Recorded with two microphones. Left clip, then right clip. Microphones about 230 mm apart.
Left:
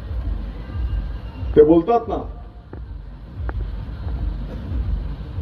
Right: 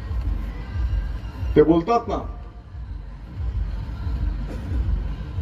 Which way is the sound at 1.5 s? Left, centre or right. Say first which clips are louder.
Left 4 dB; right.